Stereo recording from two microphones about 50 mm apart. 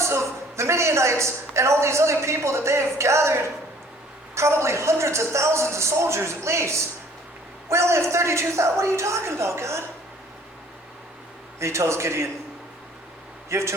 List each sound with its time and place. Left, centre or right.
0.0 s a woman's voice: right
11.6 s a woman's voice: right
13.5 s a woman's voice: right